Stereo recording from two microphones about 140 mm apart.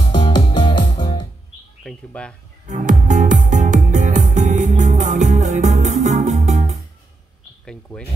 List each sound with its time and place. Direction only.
0.0 s music: 35° left (ahead or behind)
1.8 s speech: 5° left (ahead or behind)
2.6 s music: 60° right (ahead or behind)
7.6 s speech: 5° left (ahead or behind)